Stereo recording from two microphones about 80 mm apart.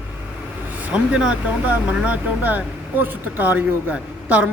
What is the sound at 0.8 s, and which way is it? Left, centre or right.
Speech, centre.